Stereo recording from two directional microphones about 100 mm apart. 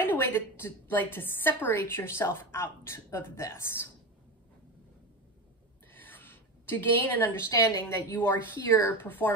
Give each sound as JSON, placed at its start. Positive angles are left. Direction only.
{"t": 0.0, "sound": "a woman's voice", "side_deg": 20}
{"t": 5.9, "sound": "a woman's voice", "side_deg": 20}